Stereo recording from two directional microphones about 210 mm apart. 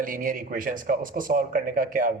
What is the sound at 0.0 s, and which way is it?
A man's voice, 40° right (ahead or behind).